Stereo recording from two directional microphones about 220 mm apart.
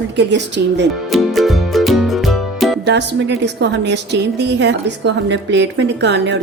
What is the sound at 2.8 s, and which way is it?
A woman's voice, 50° right (ahead or behind).